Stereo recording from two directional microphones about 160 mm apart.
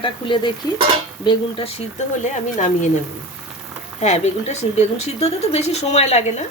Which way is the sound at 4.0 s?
45° left (ahead or behind).